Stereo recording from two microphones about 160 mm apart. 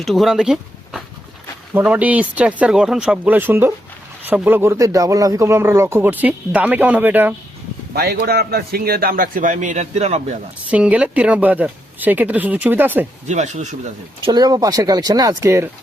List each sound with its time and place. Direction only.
0.0 s a man's voice: centre (ahead or behind)
7.9 s a man's voice: 80° right; by 10.2 s 45° right (ahead or behind)
10.7 s a man's voice: 10° right (ahead or behind)
13.2 s speech: 45° right (ahead or behind)
14.3 s speech: 25° right (ahead or behind)